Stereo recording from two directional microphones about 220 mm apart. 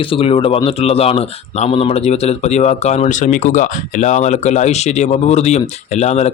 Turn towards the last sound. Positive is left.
turn(degrees=30)  # may be behind; listen again after turning